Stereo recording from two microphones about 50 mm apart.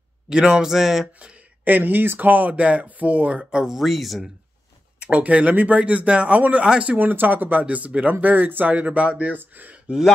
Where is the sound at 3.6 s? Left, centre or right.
Centre.